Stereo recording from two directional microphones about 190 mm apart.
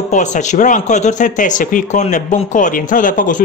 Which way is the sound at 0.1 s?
40° left (ahead or behind).